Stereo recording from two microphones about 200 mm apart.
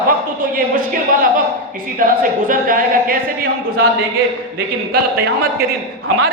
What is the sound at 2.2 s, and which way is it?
Speech, 45° right (ahead or behind).